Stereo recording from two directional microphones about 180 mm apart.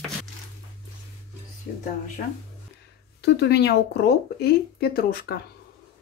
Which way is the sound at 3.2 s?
65° left (ahead or behind).